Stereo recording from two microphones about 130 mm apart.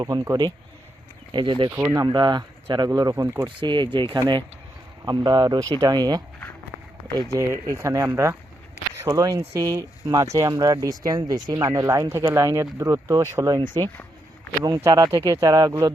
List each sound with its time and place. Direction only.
0.0 s speech: 30° right (ahead or behind)
1.3 s speech: 40° right (ahead or behind)
1.7 s speech: 25° right (ahead or behind)
3.6 s speech: 35° right (ahead or behind)
7.3 s speech: 20° right (ahead or behind)
13.6 s speech: 35° right (ahead or behind)